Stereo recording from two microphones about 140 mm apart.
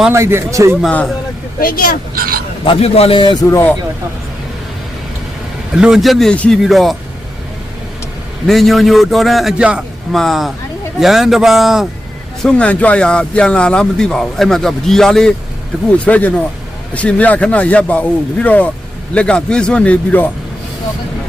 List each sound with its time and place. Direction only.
0.1 s a man's voice: 20° right (ahead or behind)
0.9 s speech: 5° left (ahead or behind)
1.5 s speech: 90° left
2.1 s speech: 90° right
2.6 s a man's voice: 45° left (ahead or behind)
3.5 s speech: 15° left (ahead or behind)
5.7 s speech: 5° right (ahead or behind)
8.4 s speech: centre (ahead or behind)